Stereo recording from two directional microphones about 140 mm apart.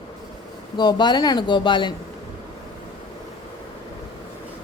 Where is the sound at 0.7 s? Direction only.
30° left (ahead or behind).